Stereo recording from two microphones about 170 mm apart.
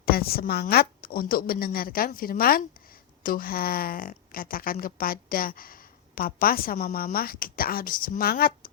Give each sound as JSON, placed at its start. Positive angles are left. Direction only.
{"t": 0.0, "sound": "a woman's voice", "side_deg": 65}